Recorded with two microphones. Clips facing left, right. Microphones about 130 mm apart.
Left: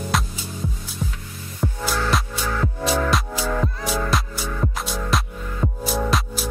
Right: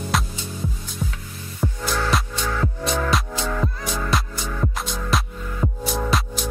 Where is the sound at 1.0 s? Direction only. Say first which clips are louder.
Even; 10° right (ahead or behind).